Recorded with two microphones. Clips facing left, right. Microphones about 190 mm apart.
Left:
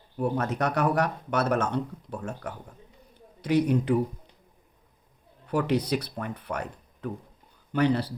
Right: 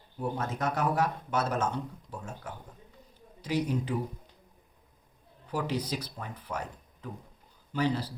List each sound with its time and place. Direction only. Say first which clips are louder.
0.2 s speech: left 6 dB; 65° left (ahead or behind)
3.2 s a sound: left 7 dB; 65° left (ahead or behind)
5.5 s speech: left 7 dB; 65° left (ahead or behind)